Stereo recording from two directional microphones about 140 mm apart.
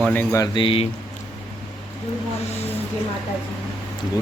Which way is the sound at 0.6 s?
40° left (ahead or behind).